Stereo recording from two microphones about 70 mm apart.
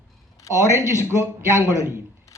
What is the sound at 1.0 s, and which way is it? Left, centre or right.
A man's voice, right.